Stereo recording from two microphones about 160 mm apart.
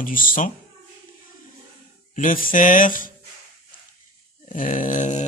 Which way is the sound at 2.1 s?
55° left (ahead or behind).